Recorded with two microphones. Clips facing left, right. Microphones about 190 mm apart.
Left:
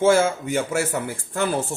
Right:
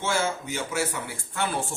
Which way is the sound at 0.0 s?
55° left (ahead or behind).